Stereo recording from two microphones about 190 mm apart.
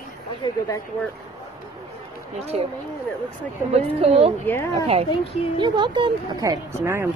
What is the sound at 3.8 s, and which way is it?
Speech, 30° right (ahead or behind).